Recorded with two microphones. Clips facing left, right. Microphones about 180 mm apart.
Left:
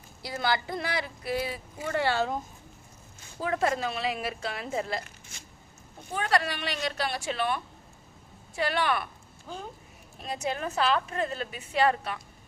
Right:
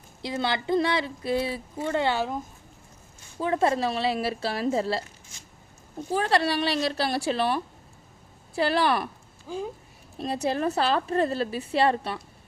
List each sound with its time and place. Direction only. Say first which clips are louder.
0.2 s speech: right 1 dB; 25° right (ahead or behind)
3.4 s a woman's voice: right 4 dB; 30° right (ahead or behind)
6.1 s a woman's voice: right 4 dB; 30° right (ahead or behind)
10.2 s a woman's voice: right 6 dB; 35° right (ahead or behind)